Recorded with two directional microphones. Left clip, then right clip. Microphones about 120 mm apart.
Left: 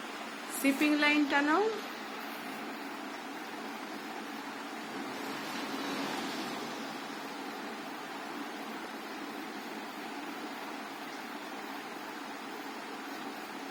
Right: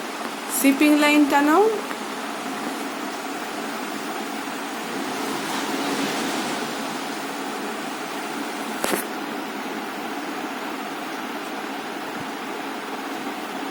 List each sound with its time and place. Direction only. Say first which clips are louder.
0.6 s speech: right 10 dB; 15° right (ahead or behind)